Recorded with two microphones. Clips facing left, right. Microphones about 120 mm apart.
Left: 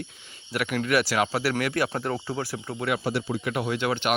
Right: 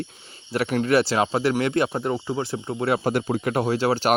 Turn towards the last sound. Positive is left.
turn(degrees=-35)  # may be behind; listen again after turning